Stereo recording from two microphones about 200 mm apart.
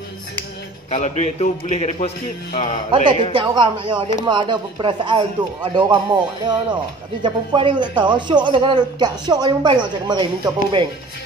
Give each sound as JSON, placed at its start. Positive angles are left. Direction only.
{"t": 0.8, "sound": "speech", "side_deg": 35}
{"t": 3.3, "sound": "speech", "side_deg": -25}